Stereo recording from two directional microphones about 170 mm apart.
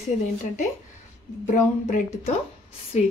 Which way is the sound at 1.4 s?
45° left (ahead or behind).